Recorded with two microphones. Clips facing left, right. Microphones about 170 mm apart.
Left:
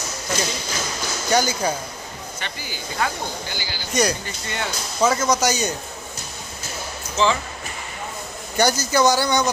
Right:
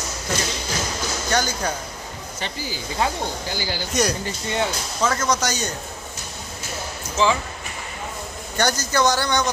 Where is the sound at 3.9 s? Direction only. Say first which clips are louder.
Left 2 dB; centre (ahead or behind).